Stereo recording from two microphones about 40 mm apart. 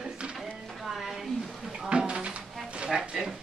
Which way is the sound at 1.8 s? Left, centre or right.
Right.